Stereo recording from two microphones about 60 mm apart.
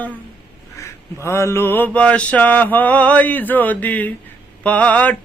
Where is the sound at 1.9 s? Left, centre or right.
Left.